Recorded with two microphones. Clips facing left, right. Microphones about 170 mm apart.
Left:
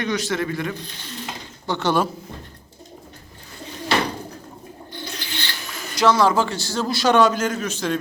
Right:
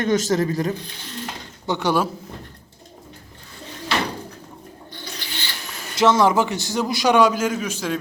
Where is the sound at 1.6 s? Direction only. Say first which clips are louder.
Even; 15° right (ahead or behind).